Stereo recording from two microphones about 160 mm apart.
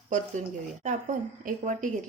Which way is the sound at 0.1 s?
50° right (ahead or behind).